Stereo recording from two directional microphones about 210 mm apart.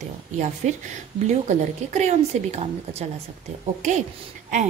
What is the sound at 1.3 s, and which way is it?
A woman's voice, 35° right (ahead or behind).